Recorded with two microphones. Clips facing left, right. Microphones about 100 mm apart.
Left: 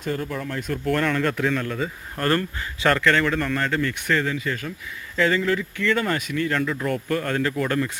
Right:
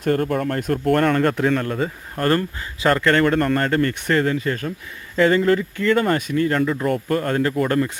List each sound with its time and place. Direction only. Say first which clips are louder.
0.0 s speech: right 8 dB; 55° right (ahead or behind); by 7.5 s 40° right (ahead or behind)